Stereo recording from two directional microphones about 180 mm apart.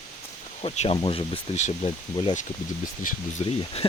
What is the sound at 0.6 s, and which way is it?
Speech, 35° left (ahead or behind).